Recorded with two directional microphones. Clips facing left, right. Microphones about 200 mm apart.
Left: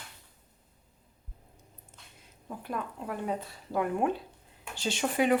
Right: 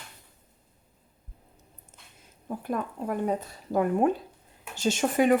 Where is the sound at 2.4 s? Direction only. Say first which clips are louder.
Right 5 dB; 45° right (ahead or behind).